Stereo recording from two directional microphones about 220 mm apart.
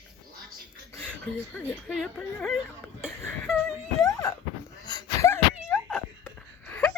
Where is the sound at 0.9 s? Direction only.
10° left (ahead or behind).